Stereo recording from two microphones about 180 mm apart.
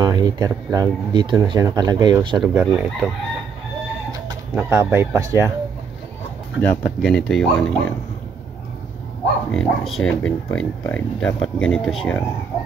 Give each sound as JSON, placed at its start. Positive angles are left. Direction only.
{"t": 0.0, "sound": "speech", "side_deg": -20}
{"t": 2.4, "sound": "speech", "side_deg": -5}
{"t": 4.6, "sound": "speech", "side_deg": -5}
{"t": 6.6, "sound": "speech", "side_deg": 5}
{"t": 9.5, "sound": "speech", "side_deg": 5}